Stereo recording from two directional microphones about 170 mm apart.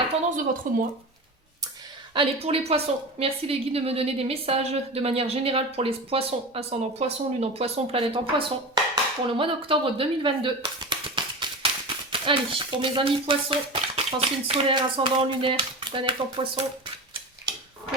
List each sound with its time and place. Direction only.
0.3 s speech: 50° right (ahead or behind)
2.1 s a woman's voice: 35° right (ahead or behind)